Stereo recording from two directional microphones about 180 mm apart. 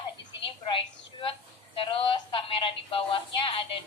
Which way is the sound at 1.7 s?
30° left (ahead or behind).